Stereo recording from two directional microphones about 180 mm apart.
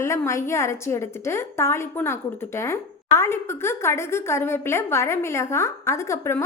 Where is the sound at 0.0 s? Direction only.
15° left (ahead or behind).